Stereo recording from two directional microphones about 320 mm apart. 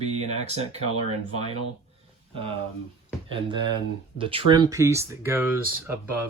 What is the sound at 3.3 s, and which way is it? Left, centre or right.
Speech, centre.